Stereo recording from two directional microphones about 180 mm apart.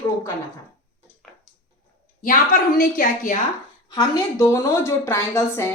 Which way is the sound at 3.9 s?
20° left (ahead or behind).